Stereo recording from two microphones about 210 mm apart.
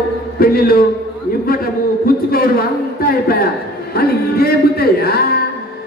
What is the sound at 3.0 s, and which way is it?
A man's voice, 45° left (ahead or behind).